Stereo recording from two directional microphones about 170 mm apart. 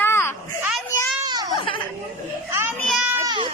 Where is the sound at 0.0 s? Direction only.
15° left (ahead or behind).